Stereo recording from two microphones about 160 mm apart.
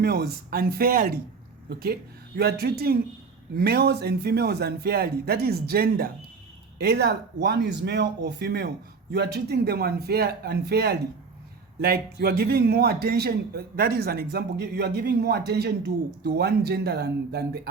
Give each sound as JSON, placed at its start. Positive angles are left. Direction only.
{"t": 0.0, "sound": "a man's voice", "side_deg": -85}
{"t": 6.7, "sound": "a man's voice", "side_deg": -90}
{"t": 11.8, "sound": "a man's voice", "side_deg": -70}